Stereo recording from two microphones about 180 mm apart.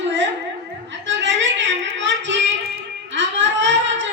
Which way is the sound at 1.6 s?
90° right.